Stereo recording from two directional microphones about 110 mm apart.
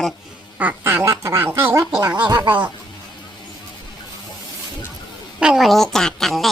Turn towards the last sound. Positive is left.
turn(degrees=0)  # may be behind; listen again after turning